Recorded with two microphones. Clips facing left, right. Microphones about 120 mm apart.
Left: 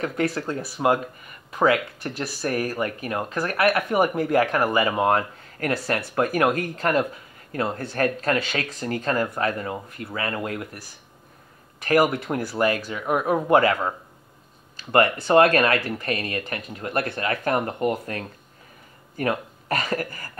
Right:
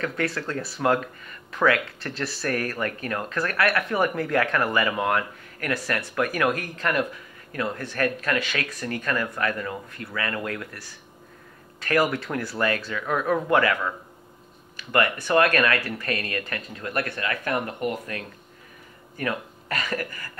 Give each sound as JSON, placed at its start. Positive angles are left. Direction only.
{"t": 0.0, "sound": "speech", "side_deg": 20}
{"t": 11.8, "sound": "speech", "side_deg": 25}